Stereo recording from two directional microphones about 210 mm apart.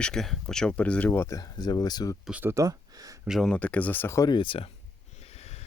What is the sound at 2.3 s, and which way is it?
Speech, 10° right (ahead or behind).